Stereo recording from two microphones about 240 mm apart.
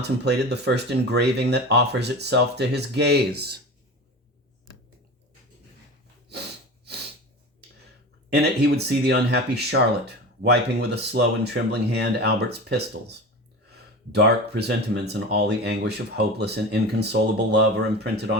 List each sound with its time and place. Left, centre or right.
0.0 s speech: right
8.3 s speech: right